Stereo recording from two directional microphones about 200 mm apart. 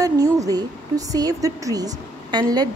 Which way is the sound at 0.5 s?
20° right (ahead or behind).